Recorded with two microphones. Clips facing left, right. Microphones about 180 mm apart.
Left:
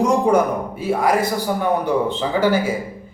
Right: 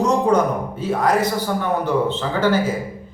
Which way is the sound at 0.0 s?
10° left (ahead or behind).